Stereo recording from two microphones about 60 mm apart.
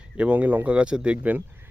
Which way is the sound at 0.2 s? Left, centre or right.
Right.